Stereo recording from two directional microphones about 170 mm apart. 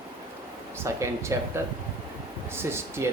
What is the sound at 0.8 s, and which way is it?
Speech, 15° right (ahead or behind).